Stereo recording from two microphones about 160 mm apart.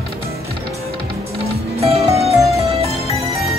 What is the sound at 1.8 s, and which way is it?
Music, 40° right (ahead or behind).